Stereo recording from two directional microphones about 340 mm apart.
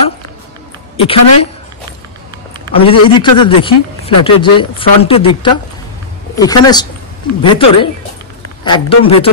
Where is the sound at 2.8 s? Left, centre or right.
Centre.